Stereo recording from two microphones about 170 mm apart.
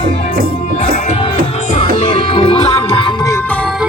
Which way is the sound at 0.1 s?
40° left (ahead or behind).